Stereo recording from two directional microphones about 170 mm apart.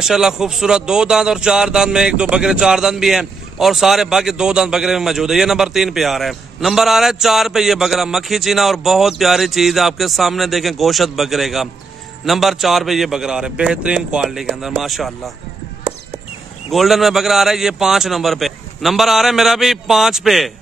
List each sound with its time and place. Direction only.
0.0 s speech: centre (ahead or behind)
16.7 s speech: centre (ahead or behind)